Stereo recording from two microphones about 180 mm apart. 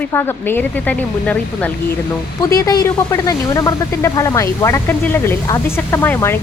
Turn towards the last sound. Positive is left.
turn(degrees=10)  # may be behind; listen again after turning